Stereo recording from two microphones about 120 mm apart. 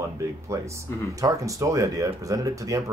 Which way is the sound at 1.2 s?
25° right (ahead or behind).